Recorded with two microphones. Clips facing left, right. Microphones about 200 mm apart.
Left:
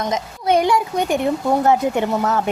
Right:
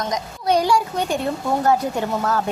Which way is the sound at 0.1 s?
20° left (ahead or behind).